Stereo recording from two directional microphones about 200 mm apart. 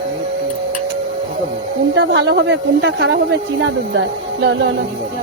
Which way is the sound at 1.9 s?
60° right (ahead or behind).